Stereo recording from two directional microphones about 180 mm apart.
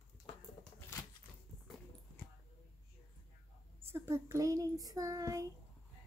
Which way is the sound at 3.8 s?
15° right (ahead or behind).